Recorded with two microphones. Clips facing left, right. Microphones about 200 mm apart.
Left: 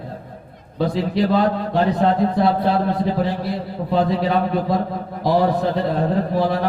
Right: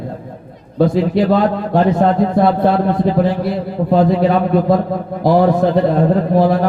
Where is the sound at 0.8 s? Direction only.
50° right (ahead or behind).